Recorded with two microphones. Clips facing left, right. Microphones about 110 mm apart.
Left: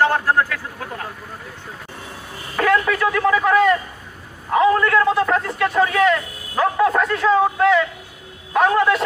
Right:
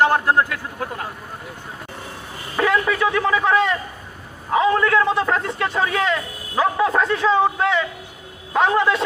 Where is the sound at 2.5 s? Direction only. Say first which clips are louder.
Left 2 dB; 15° right (ahead or behind).